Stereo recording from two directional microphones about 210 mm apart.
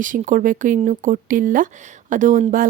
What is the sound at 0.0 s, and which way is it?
Speech, 40° right (ahead or behind).